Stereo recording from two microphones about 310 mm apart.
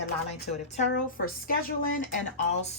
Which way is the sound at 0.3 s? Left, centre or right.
Left.